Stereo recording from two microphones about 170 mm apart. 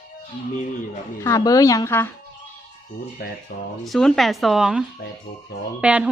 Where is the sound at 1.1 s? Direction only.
20° left (ahead or behind).